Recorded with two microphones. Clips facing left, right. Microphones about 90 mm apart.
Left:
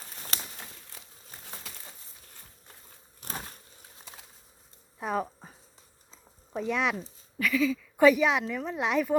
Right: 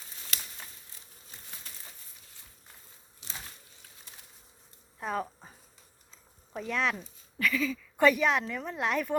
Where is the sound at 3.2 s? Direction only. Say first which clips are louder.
Left 7 dB; 50° left (ahead or behind).